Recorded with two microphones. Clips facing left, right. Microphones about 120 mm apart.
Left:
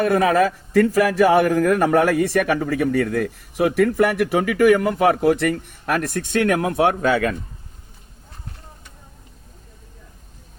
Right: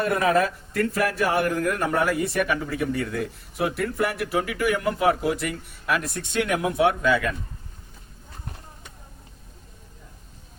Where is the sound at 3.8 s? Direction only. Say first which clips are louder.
Left 8 dB; 90° left; by 7.2 s 40° left (ahead or behind).